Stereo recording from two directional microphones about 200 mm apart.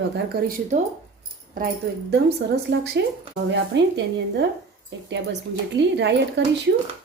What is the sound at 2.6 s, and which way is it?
Speech, 55° right (ahead or behind).